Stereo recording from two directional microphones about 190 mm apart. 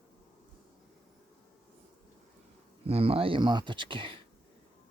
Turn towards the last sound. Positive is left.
turn(degrees=-25)  # may be behind; listen again after turning